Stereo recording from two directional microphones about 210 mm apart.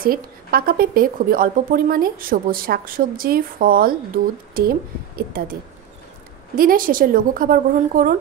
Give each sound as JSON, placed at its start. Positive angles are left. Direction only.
{"t": 0.0, "sound": "a woman's voice", "side_deg": -45}
{"t": 6.5, "sound": "a woman's voice", "side_deg": -45}